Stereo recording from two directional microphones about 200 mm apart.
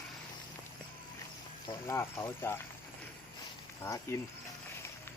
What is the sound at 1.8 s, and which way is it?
Speech, 10° left (ahead or behind).